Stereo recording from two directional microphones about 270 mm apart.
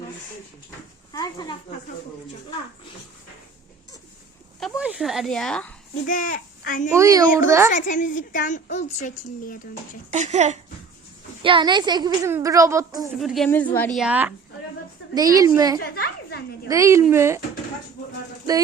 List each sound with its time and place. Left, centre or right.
1.1 s a sound: centre
4.6 s a woman's voice: centre
6.1 s speech: left
6.9 s speech: centre
7.7 s a woman's voice: left
10.1 s speech: right
13.1 s a woman's voice: centre
15.8 s a woman's voice: left
16.6 s speech: centre